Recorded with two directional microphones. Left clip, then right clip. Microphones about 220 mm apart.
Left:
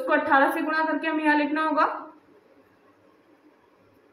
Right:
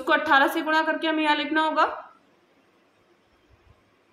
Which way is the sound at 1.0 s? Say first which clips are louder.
Even; 25° right (ahead or behind).